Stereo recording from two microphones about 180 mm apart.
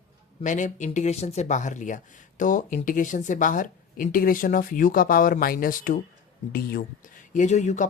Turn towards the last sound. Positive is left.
turn(degrees=40)  # may be behind; listen again after turning